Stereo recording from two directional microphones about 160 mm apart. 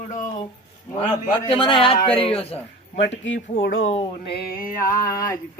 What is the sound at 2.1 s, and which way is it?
Speech, 35° left (ahead or behind).